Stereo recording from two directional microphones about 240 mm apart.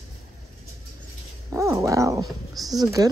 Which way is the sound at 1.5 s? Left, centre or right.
Centre.